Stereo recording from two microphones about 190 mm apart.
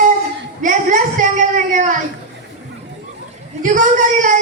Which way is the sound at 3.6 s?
40° right (ahead or behind).